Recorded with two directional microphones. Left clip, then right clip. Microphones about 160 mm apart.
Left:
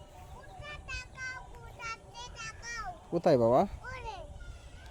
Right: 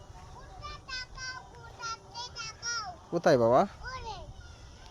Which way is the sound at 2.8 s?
10° left (ahead or behind).